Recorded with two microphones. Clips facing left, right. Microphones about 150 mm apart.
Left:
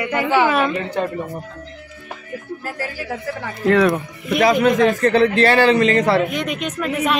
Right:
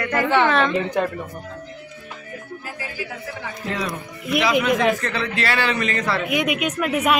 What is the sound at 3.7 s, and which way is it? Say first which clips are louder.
Speech: left 13 dB; 65° left (ahead or behind).